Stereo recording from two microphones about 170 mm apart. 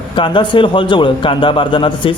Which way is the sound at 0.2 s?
30° left (ahead or behind).